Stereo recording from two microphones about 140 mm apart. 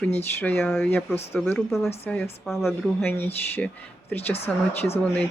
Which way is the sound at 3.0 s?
15° left (ahead or behind).